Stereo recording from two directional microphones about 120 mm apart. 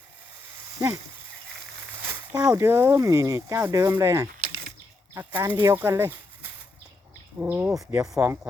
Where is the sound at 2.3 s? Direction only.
30° right (ahead or behind).